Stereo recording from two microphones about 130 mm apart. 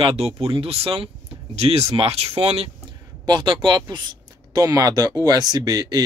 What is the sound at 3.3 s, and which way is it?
Speech, 35° right (ahead or behind).